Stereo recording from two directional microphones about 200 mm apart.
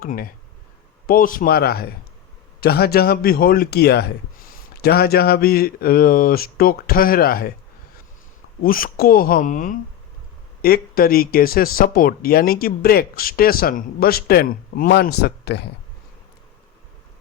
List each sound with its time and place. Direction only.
0.0 s speech: 45° left (ahead or behind)
8.6 s speech: 45° left (ahead or behind)